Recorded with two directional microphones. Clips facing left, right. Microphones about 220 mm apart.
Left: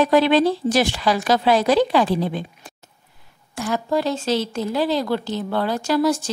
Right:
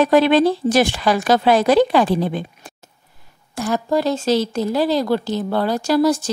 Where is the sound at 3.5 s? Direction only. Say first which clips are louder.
Right 3 dB; 40° right (ahead or behind).